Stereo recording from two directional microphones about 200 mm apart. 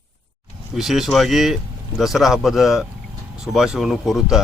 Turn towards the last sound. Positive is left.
turn(degrees=0)  # may be behind; listen again after turning